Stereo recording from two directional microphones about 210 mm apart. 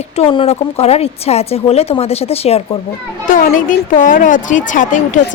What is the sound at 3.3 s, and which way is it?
A woman's voice, 40° left (ahead or behind).